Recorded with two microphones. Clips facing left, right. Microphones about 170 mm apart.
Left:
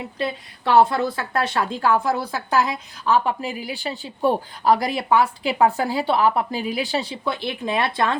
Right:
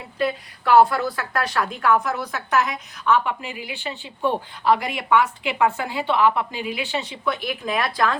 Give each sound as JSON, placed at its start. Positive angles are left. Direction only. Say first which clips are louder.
{"t": 0.2, "sound": "a woman's voice", "louder": "right 4 dB", "side_deg": 25}